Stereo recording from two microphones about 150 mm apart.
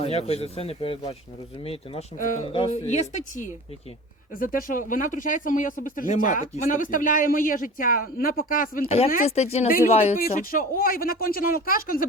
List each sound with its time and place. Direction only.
0.0 s speech: 45° left (ahead or behind)
2.1 s speech: 60° left (ahead or behind)
2.5 s speech: 40° left (ahead or behind)
4.4 s speech: 65° left (ahead or behind)
9.2 s speech: 45° left (ahead or behind)
9.6 s speech: 70° left (ahead or behind)
9.9 s speech: 45° left (ahead or behind)
10.2 s speech: 75° left (ahead or behind)